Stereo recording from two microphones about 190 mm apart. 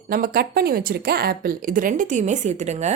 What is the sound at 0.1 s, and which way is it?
Speech, 50° right (ahead or behind).